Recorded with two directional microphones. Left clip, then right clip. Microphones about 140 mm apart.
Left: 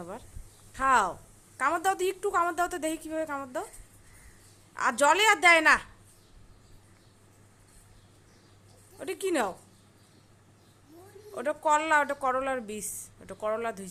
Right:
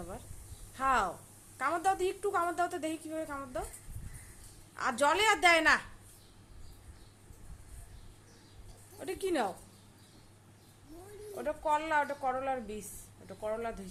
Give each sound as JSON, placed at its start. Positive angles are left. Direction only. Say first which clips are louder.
{"t": 0.7, "sound": "a woman's voice", "louder": "left 6 dB", "side_deg": 25}
{"t": 4.7, "sound": "a woman's voice", "louder": "left 6 dB", "side_deg": 30}
{"t": 9.0, "sound": "a woman's voice", "louder": "left 4 dB", "side_deg": 30}
{"t": 11.3, "sound": "a woman's voice", "louder": "left 6 dB", "side_deg": 45}